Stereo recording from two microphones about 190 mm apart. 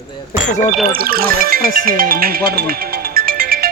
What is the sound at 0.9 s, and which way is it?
Speech, 50° right (ahead or behind).